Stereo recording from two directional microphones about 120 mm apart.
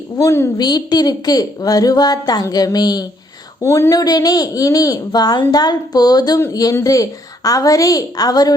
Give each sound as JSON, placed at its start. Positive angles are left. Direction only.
{"t": 0.2, "sound": "a woman's voice", "side_deg": 25}
{"t": 0.5, "sound": "speech", "side_deg": 35}